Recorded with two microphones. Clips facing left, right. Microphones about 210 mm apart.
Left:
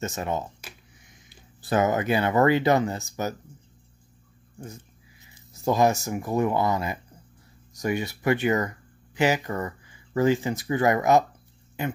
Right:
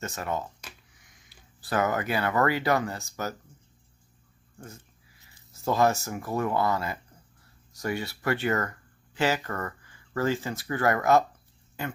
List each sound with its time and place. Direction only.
0.0 s speech: 20° left (ahead or behind)
5.5 s speech: 15° left (ahead or behind)